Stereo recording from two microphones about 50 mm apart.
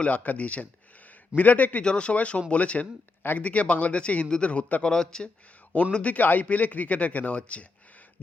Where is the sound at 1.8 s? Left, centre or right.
Left.